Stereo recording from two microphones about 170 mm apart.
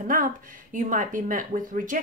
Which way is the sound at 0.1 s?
50° right (ahead or behind).